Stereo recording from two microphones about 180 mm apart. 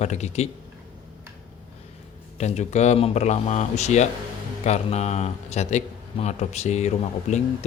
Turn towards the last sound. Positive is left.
turn(degrees=40)  # may be behind; listen again after turning